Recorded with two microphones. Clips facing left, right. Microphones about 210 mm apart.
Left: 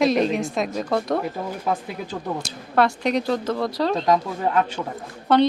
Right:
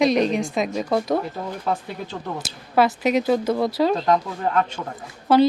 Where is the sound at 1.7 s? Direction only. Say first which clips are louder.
Even; 10° left (ahead or behind).